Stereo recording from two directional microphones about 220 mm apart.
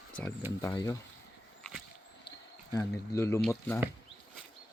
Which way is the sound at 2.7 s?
15° left (ahead or behind).